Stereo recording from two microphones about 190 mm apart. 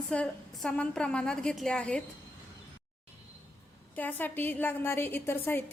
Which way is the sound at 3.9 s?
10° left (ahead or behind).